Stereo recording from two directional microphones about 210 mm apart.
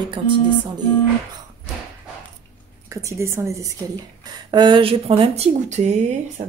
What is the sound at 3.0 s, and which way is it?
A woman's voice, 15° right (ahead or behind).